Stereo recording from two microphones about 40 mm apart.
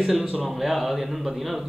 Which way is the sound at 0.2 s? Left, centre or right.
Right.